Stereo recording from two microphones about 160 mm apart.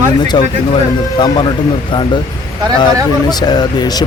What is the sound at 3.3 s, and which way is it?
Speech, 25° left (ahead or behind).